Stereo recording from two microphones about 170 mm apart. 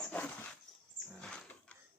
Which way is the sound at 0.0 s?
10° left (ahead or behind).